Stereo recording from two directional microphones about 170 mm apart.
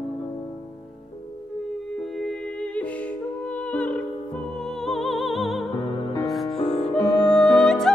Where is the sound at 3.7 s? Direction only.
10° left (ahead or behind).